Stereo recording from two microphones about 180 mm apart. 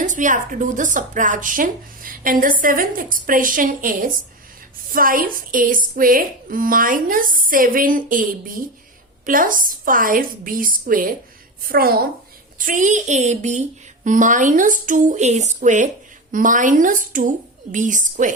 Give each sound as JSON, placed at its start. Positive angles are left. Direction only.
{"t": 0.0, "sound": "a woman's voice", "side_deg": -45}
{"t": 12.5, "sound": "a woman's voice", "side_deg": -45}